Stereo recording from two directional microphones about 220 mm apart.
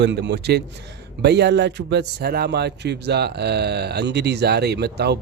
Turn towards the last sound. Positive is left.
turn(degrees=-50)  # may be behind; listen again after turning